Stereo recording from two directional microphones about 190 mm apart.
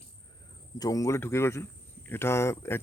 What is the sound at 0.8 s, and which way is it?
Mantra, 20° left (ahead or behind).